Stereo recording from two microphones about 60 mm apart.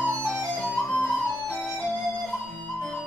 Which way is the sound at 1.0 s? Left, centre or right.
Left.